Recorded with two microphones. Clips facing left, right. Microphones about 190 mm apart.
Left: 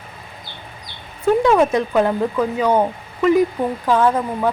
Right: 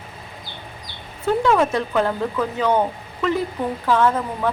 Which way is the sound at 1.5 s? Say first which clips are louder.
Left 3 dB; 20° left (ahead or behind).